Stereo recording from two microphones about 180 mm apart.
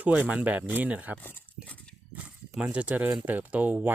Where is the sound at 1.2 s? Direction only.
10° left (ahead or behind).